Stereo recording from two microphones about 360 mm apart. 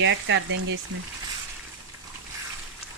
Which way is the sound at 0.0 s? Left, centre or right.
Right.